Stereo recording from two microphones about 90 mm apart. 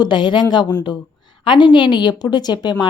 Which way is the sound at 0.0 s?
60° left (ahead or behind).